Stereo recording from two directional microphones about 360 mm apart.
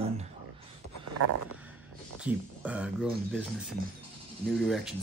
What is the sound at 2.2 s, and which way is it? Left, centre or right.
Speech, centre.